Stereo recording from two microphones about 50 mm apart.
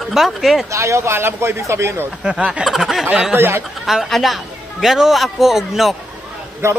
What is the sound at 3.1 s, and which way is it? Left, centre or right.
Speech, right.